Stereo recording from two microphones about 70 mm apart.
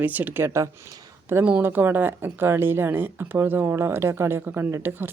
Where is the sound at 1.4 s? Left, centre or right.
Right.